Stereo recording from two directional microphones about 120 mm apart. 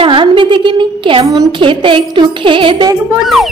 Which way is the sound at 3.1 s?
Centre (ahead or behind).